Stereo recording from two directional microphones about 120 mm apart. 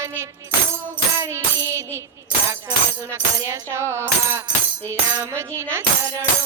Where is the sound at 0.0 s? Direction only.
20° right (ahead or behind).